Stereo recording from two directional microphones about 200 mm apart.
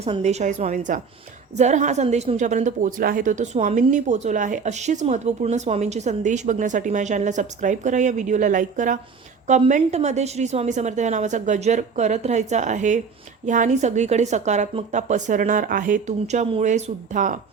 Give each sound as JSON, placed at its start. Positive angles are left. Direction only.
{"t": 0.0, "sound": "a woman's voice", "side_deg": -30}